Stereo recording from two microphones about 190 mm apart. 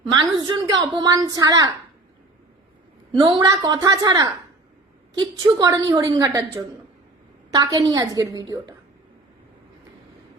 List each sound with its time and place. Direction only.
0.1 s a woman's voice: 20° right (ahead or behind)
3.2 s a woman's voice: 25° right (ahead or behind)